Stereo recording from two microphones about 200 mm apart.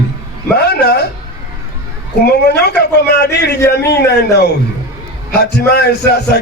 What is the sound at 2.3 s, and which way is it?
Speech, 55° left (ahead or behind).